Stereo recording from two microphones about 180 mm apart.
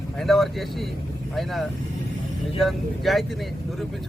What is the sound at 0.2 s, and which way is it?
Speech, centre (ahead or behind).